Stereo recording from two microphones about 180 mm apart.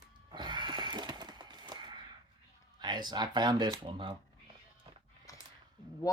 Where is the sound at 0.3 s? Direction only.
25° right (ahead or behind).